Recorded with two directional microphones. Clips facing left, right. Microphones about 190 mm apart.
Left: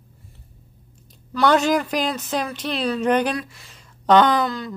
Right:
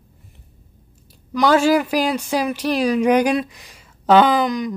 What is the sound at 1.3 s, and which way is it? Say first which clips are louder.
Speech: right 3 dB; 10° right (ahead or behind).